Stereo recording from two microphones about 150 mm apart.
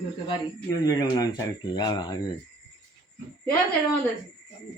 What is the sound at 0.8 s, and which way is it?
Speech, 25° left (ahead or behind).